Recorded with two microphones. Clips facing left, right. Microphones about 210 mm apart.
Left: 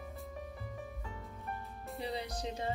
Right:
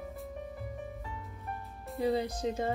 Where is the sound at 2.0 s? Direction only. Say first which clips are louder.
Right 9 dB; 50° right (ahead or behind).